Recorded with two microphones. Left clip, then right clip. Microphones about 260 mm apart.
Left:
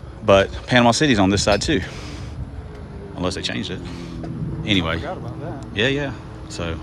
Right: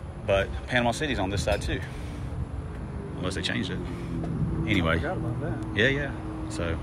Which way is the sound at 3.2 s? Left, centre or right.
Centre.